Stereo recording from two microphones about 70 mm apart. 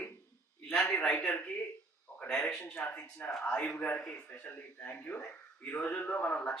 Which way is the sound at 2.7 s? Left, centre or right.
Left.